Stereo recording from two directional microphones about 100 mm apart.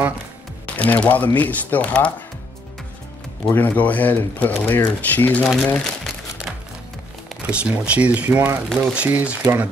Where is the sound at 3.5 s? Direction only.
15° left (ahead or behind).